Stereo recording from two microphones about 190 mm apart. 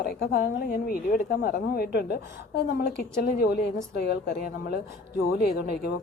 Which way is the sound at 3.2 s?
55° left (ahead or behind).